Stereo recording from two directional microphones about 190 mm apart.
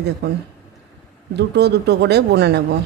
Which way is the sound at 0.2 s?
60° right (ahead or behind).